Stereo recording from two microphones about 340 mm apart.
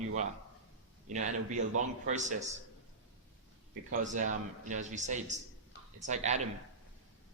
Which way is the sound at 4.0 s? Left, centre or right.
Right.